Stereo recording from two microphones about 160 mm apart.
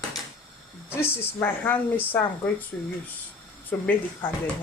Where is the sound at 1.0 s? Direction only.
15° left (ahead or behind).